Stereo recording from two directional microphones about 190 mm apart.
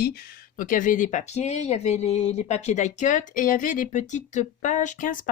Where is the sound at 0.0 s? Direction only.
55° left (ahead or behind).